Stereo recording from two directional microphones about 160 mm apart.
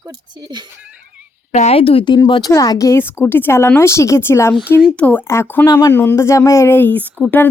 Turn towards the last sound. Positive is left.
turn(degrees=10)  # may be behind; listen again after turning